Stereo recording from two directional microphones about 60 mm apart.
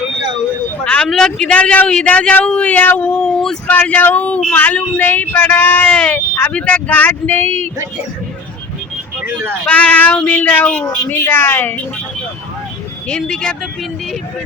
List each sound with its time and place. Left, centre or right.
1.0 s speech: centre
1.5 s a man's voice: left
3.2 s speech: centre
3.7 s a man's voice: left
6.0 s a man's voice: left
9.6 s a man's voice: left
10.8 s speech: left
11.1 s speech: left
13.1 s speech: centre